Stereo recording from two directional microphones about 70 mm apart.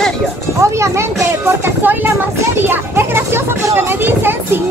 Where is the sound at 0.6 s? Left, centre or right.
Right.